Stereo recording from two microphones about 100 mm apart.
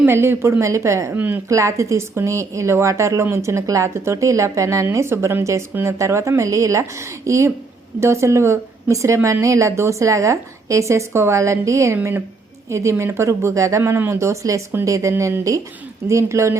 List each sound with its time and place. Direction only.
0.1 s a woman's voice: 25° right (ahead or behind)
1.1 s speech: 20° right (ahead or behind)
1.5 s a woman's voice: 30° right (ahead or behind)